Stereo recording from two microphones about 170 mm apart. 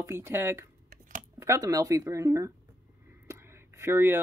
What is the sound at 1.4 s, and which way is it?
Speech, 15° right (ahead or behind).